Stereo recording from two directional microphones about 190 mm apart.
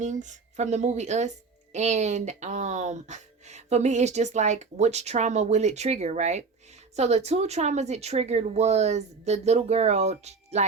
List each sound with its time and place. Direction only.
0.0 s speech: 40° right (ahead or behind)